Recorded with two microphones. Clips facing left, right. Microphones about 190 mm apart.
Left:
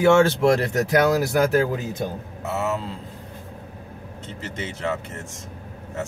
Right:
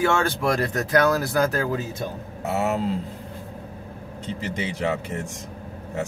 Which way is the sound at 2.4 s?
15° right (ahead or behind).